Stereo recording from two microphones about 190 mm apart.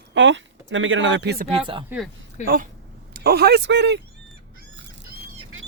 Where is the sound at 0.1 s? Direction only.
70° right (ahead or behind).